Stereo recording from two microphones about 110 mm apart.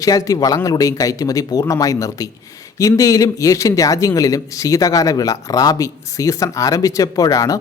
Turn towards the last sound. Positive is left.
turn(degrees=30)  # may be behind; listen again after turning